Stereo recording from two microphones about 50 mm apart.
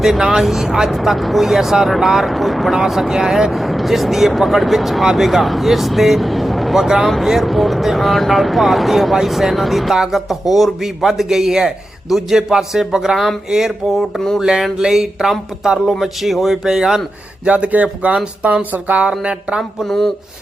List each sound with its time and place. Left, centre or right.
0.0 s speech: centre
17.4 s speech: right
19.8 s speech: centre